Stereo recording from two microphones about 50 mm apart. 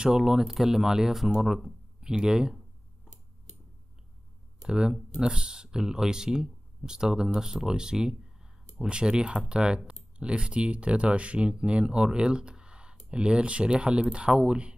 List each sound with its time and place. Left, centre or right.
0.0 s speech: centre
4.6 s speech: centre